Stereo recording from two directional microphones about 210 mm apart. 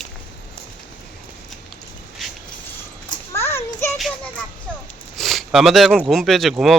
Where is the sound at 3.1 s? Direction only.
10° left (ahead or behind).